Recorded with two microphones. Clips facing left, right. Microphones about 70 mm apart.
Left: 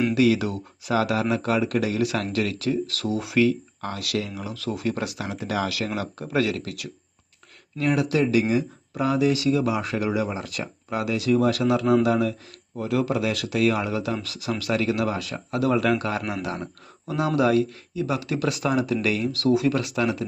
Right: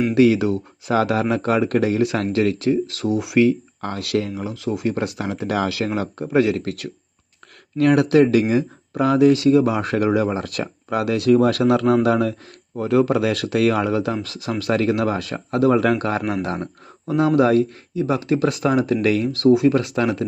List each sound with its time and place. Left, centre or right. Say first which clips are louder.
0.1 s speech: right 5 dB; right; by 3.3 s centre
3.3 s speech: right 4 dB; right
4.5 s speech: right 4 dB; right
5.3 s speech: right 4 dB; right
5.6 s speech: right 5 dB; right
7.8 s speech: right 8 dB; right
19.7 s speech: right 4 dB; right